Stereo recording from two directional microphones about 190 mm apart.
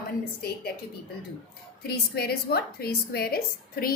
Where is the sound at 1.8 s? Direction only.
55° left (ahead or behind).